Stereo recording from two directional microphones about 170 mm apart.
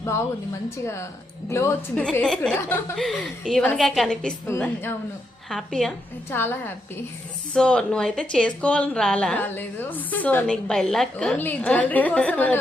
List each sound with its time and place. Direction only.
1.5 s a woman's voice: 15° left (ahead or behind)
2.0 s a woman's voice: 5° left (ahead or behind)
6.3 s a woman's voice: 15° left (ahead or behind)